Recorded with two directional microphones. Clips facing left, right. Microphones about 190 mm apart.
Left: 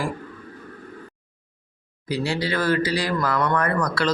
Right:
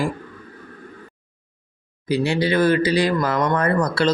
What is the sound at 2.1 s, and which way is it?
Speech, 20° right (ahead or behind).